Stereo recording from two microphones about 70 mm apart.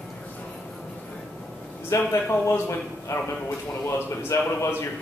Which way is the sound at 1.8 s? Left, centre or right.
Left.